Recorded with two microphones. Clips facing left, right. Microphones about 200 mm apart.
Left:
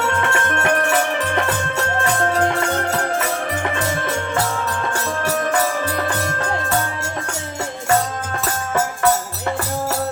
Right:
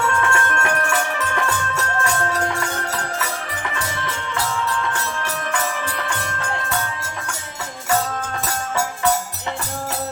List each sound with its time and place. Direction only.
0.0 s music: 20° left (ahead or behind)
3.8 s music: 50° left (ahead or behind)